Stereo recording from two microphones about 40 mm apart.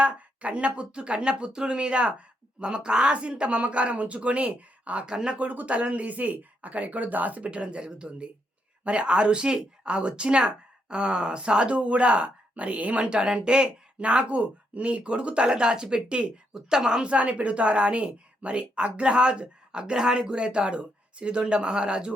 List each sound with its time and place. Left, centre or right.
0.0 s speech: right
5.0 s speech: right
5.4 s speech: right
16.6 s speech: centre
17.1 s speech: right